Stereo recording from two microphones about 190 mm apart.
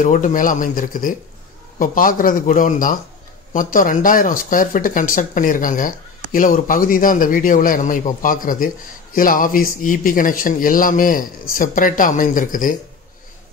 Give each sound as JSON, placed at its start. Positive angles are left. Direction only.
{"t": 0.0, "sound": "speech", "side_deg": 45}